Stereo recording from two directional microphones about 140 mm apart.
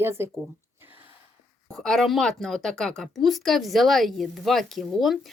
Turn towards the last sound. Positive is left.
turn(degrees=0)  # may be behind; listen again after turning